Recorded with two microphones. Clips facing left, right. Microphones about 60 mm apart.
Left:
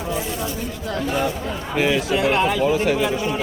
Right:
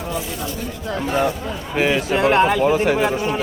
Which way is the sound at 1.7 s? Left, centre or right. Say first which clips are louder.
Right 1 dB; right.